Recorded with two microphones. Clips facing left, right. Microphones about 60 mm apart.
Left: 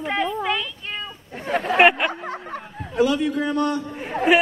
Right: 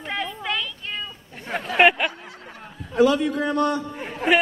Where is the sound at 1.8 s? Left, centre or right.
Centre.